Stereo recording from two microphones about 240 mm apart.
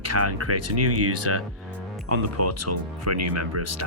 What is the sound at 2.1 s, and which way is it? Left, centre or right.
Speech, right.